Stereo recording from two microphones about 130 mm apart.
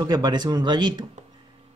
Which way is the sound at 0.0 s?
30° right (ahead or behind).